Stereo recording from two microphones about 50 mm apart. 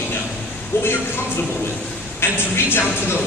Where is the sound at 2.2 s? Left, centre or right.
Left.